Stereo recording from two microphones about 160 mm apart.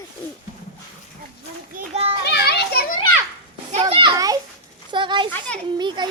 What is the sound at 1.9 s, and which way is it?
Children playing, 35° right (ahead or behind).